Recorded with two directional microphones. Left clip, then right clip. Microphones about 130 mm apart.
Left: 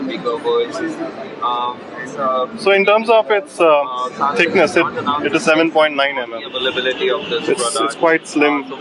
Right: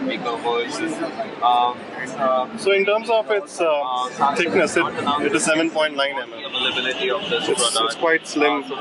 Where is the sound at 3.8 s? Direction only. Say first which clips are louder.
Left 1 dB; 20° right (ahead or behind).